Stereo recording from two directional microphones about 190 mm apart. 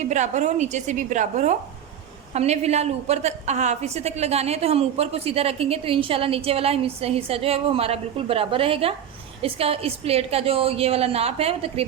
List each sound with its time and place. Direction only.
0.0 s a woman's voice: 40° right (ahead or behind)